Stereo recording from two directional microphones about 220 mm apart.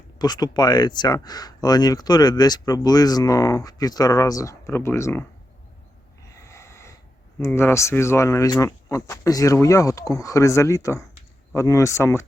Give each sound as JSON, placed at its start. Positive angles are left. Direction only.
{"t": 0.2, "sound": "speech", "side_deg": 20}
{"t": 6.3, "sound": "snort", "side_deg": 15}
{"t": 7.3, "sound": "speech", "side_deg": 10}